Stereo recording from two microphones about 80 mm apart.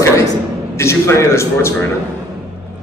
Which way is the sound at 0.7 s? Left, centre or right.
Left.